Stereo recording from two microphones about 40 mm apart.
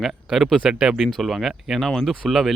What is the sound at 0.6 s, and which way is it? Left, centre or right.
Speech, centre.